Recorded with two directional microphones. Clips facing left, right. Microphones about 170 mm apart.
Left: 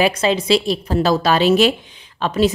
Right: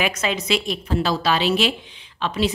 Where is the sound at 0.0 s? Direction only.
30° left (ahead or behind).